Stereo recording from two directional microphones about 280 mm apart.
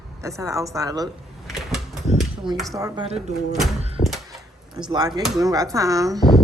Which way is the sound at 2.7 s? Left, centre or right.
Centre.